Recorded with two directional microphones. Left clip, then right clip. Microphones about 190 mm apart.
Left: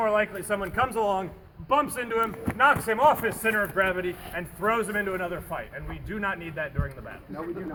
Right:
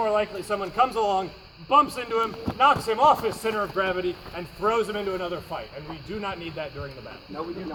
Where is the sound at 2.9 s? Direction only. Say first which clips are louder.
Right 2 dB; 20° left (ahead or behind).